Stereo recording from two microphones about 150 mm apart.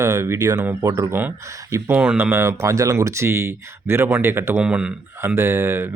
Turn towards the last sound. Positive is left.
turn(degrees=-15)  # may be behind; listen again after turning